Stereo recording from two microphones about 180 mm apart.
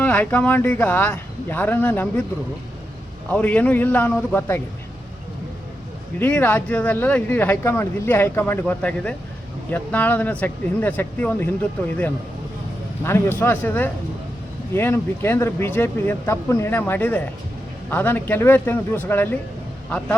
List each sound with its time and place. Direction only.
0.0 s speech: 10° left (ahead or behind)
3.3 s speech: 10° left (ahead or behind)
6.1 s speech: 10° left (ahead or behind)
13.1 s speech: 10° left (ahead or behind)